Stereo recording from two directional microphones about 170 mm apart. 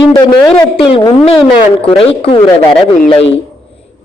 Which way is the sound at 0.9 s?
30° left (ahead or behind).